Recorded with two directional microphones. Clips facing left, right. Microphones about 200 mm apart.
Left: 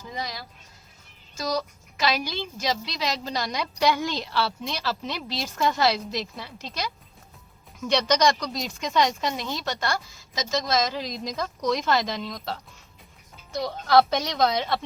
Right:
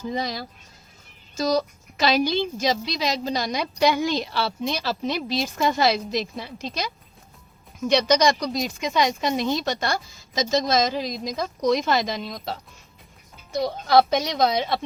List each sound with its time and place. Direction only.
0.1 s a woman's voice: 30° right (ahead or behind)